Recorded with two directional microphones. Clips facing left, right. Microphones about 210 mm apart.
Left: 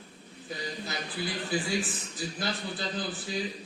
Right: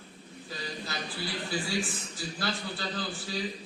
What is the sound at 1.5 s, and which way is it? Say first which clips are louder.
A man's voice: left 2 dB; 20° left (ahead or behind).